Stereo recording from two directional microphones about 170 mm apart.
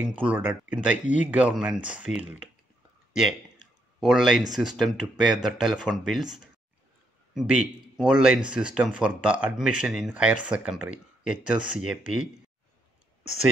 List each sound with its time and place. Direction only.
0.3 s speech: 10° right (ahead or behind)
1.0 s speech: 45° left (ahead or behind)
1.3 s speech: 5° right (ahead or behind)
3.1 s a sound: 5° right (ahead or behind)
4.0 s speech: 5° right (ahead or behind)